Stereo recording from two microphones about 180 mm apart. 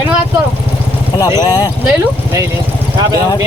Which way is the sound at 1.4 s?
20° left (ahead or behind).